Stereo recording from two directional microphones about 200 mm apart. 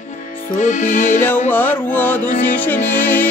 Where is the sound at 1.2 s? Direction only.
10° left (ahead or behind).